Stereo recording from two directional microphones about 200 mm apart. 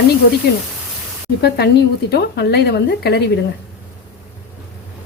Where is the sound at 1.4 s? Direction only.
55° left (ahead or behind).